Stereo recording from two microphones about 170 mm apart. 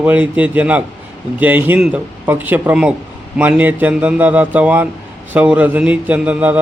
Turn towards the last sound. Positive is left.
turn(degrees=-10)  # may be behind; listen again after turning